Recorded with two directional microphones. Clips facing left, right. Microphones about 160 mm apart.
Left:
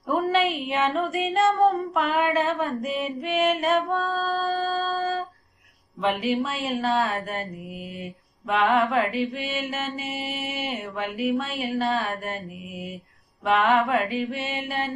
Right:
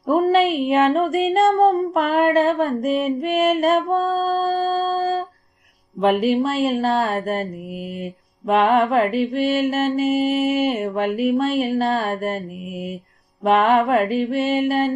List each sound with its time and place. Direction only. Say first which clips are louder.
0.1 s mantra: right 6 dB; 45° right (ahead or behind)
13.4 s mantra: right 5 dB; 45° right (ahead or behind)